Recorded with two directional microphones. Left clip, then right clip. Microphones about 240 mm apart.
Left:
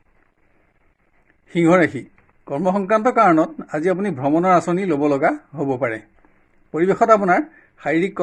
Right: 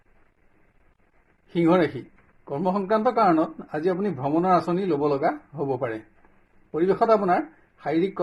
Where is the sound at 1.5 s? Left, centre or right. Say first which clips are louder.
Left 5 dB; left.